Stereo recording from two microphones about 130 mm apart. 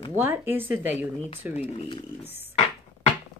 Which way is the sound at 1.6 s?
50° left (ahead or behind).